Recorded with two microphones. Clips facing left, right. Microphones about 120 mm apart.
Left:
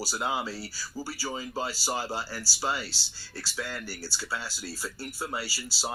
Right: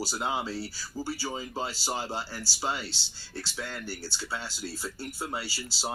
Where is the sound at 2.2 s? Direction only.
20° right (ahead or behind).